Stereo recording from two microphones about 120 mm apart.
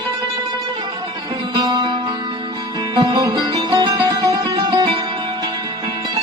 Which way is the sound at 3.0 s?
35° right (ahead or behind).